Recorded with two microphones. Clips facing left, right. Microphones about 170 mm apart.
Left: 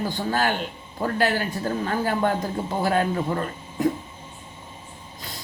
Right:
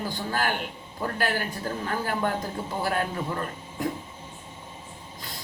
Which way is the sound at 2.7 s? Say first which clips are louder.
Left 6 dB; 20° left (ahead or behind).